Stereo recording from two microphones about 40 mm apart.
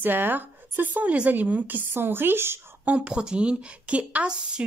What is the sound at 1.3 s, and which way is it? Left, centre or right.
Speech, right.